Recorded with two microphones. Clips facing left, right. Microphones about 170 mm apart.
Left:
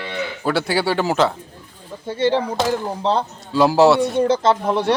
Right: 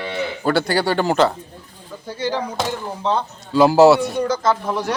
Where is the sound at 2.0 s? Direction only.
25° left (ahead or behind).